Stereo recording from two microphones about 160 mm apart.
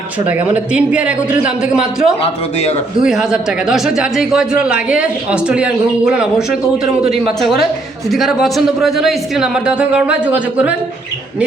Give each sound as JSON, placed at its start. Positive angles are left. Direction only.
{"t": 0.3, "sound": "a man's voice", "side_deg": -10}
{"t": 2.2, "sound": "speech", "side_deg": 40}
{"t": 3.0, "sound": "speech", "side_deg": -5}
{"t": 8.1, "sound": "speech", "side_deg": 0}